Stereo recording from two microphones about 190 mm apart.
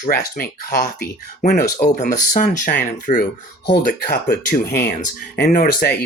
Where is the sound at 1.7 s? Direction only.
40° left (ahead or behind).